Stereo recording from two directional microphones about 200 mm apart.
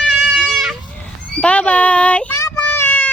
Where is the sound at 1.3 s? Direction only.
5° left (ahead or behind).